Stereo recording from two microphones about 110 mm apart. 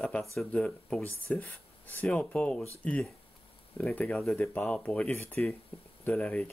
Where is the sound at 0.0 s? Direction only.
5° left (ahead or behind).